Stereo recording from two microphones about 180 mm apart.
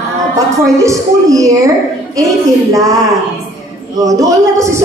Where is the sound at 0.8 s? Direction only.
15° right (ahead or behind).